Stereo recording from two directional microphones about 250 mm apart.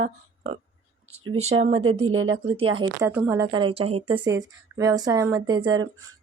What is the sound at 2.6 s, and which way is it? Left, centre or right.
A woman's voice, right.